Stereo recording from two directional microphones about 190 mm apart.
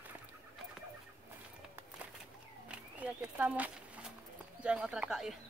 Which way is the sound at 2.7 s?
5° right (ahead or behind).